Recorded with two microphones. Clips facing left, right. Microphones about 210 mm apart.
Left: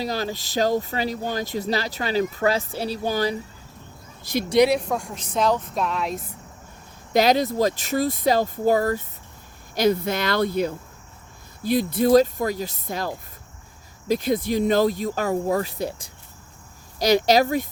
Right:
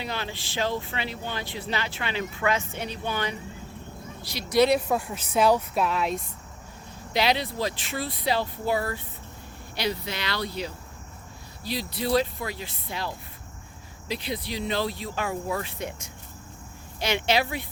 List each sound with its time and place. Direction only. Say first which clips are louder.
0.0 s speech: left 7 dB; 40° left (ahead or behind)
4.2 s speech: left 13 dB; 50° left (ahead or behind)
4.7 s a woman's voice: even; 5° right (ahead or behind)
7.1 s speech: left 7 dB; 45° left (ahead or behind)